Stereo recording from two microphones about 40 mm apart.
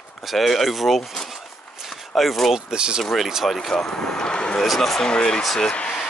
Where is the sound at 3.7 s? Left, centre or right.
Centre.